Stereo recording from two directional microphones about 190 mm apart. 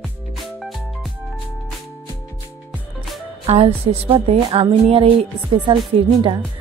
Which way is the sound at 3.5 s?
30° right (ahead or behind).